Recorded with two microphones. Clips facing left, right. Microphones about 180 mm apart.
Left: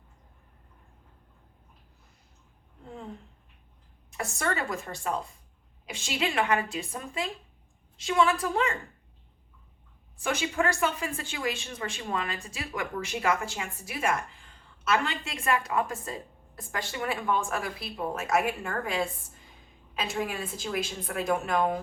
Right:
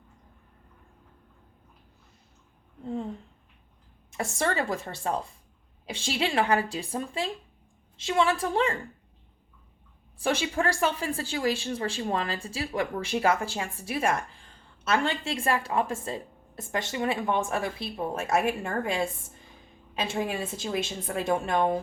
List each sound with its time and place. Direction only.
4.2 s a woman's voice: 30° right (ahead or behind)
10.2 s a woman's voice: 35° right (ahead or behind)